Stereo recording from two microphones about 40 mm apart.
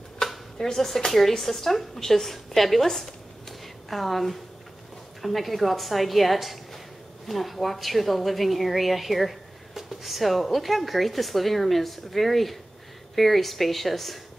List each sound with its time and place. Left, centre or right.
0.2 s dishes: centre
0.6 s a woman's voice: centre